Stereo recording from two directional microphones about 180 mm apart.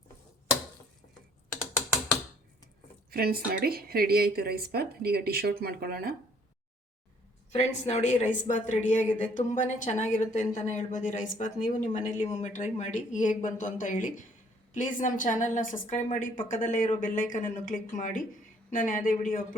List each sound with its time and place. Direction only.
3.1 s a woman's voice: 55° right (ahead or behind)
7.5 s a woman's voice: 35° left (ahead or behind)